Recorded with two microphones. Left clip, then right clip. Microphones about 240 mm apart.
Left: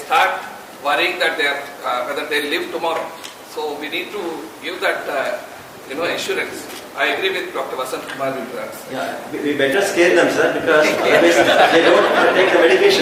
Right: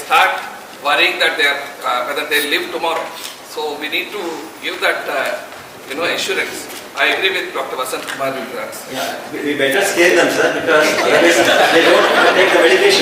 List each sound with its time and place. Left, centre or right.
0.1 s a man's voice: centre